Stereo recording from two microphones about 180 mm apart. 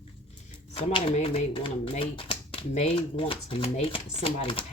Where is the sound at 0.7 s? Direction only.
35° left (ahead or behind).